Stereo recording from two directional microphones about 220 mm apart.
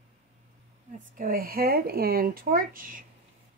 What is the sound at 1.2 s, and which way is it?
Speech, 40° right (ahead or behind).